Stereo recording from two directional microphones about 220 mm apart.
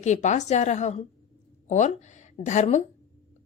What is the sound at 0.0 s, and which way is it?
A woman's voice, 30° left (ahead or behind).